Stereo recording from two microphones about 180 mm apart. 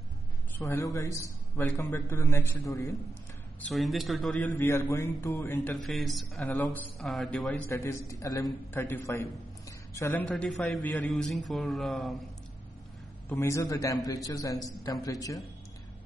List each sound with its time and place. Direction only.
0.7 s a man's voice: 15° left (ahead or behind)
3.7 s a man's voice: centre (ahead or behind)
4.6 s a man's voice: 15° left (ahead or behind)
5.9 s a man's voice: centre (ahead or behind)
10.2 s a man's voice: centre (ahead or behind)
13.3 s a man's voice: 15° left (ahead or behind)